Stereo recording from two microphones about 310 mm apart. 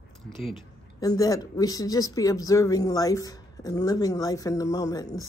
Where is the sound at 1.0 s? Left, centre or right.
Centre.